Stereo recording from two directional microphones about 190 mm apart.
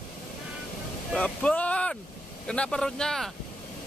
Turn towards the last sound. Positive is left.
turn(degrees=0)  # may be behind; listen again after turning